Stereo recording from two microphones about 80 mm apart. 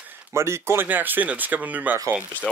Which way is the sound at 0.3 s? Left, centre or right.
Right.